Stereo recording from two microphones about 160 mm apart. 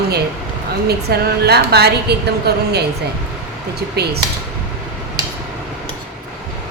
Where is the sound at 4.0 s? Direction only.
90° right.